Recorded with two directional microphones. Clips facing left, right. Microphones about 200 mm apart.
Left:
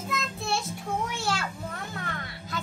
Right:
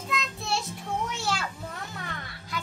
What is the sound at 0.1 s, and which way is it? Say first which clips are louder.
Child singing: even; centre (ahead or behind).